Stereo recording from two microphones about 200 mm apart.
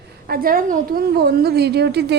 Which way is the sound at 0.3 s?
45° right (ahead or behind).